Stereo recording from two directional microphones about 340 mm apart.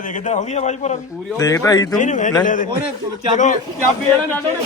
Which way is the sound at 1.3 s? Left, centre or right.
Centre.